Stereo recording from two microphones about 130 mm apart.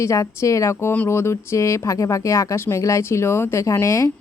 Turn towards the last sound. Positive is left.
turn(degrees=25)  # may be behind; listen again after turning